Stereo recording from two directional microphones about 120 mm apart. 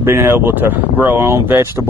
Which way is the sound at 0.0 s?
20° right (ahead or behind).